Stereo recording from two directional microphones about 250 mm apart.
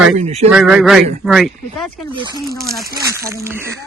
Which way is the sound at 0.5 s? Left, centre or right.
Centre.